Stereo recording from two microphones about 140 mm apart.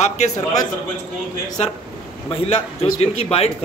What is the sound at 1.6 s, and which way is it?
Speech, 55° left (ahead or behind).